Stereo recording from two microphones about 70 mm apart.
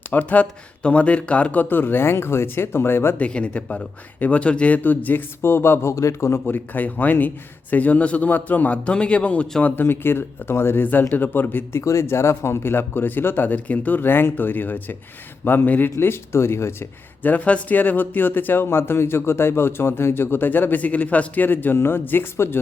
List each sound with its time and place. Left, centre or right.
0.1 s speech: left
3.2 s speech: centre; by 5.9 s left
5.9 s a man's voice: left
6.4 s speech: left
9.6 s speech: left
11.8 s speech: left
17.2 s speech: left